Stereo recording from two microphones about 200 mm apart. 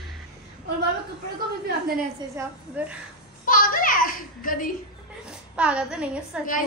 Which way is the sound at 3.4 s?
45° left (ahead or behind).